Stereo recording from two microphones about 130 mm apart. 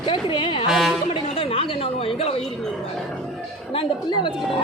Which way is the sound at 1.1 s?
45° left (ahead or behind).